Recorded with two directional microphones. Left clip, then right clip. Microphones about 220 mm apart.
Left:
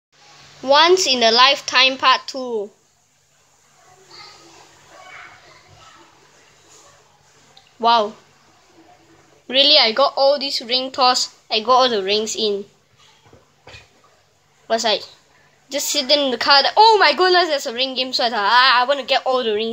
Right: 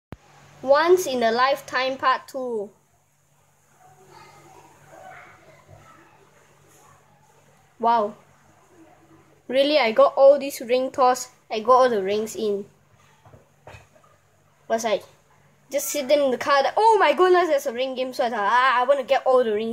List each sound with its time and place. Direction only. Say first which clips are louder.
0.7 s a woman's voice: left 5 dB; 5° right (ahead or behind)
7.8 s a woman's voice: left 5 dB; 10° right (ahead or behind)
9.5 s a woman's voice: left 6 dB; 20° right (ahead or behind)
14.7 s a woman's voice: left 4 dB; 10° right (ahead or behind)